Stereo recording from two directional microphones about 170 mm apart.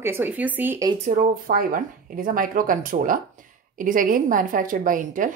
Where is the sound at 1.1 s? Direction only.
55° right (ahead or behind).